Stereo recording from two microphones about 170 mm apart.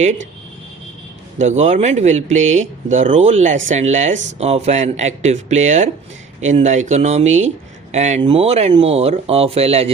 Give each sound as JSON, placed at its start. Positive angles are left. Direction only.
{"t": 1.4, "sound": "speech", "side_deg": -40}